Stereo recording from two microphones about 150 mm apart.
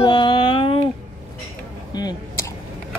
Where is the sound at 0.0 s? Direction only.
30° left (ahead or behind).